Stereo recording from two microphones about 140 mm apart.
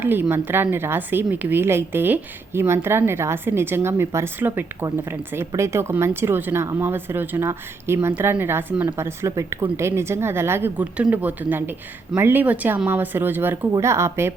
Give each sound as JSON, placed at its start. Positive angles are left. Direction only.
{"t": 0.0, "sound": "a woman's voice", "side_deg": -15}